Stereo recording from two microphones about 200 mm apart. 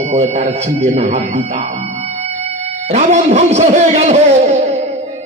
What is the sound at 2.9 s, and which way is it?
A man's voice, 35° right (ahead or behind).